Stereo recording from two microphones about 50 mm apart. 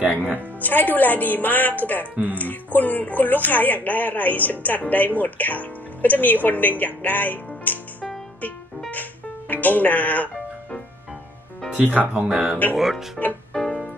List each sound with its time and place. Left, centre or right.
0.0 s speech: right
0.6 s speech: left
9.5 s speech: left
11.8 s speech: right
12.3 s speech: centre
13.2 s music: centre
13.5 s keyboard: centre